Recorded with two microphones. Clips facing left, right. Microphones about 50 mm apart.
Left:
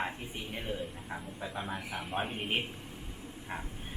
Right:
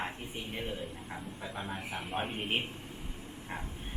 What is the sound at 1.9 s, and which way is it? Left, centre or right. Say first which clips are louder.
A man's voice: even; centre.